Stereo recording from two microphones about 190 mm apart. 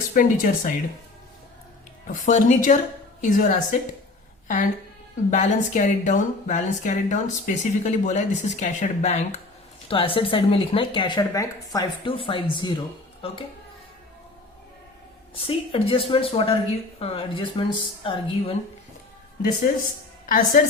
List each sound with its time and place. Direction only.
0.1 s speech: 45° left (ahead or behind)
2.0 s a woman's voice: 40° left (ahead or behind); by 12.8 s 25° left (ahead or behind)
15.4 s speech: 30° left (ahead or behind)
20.2 s speech: 45° left (ahead or behind)